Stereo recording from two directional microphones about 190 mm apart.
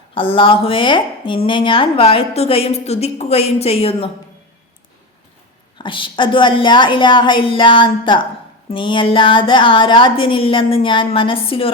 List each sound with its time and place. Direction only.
0.1 s speech: 25° left (ahead or behind)
5.7 s speech: 25° left (ahead or behind)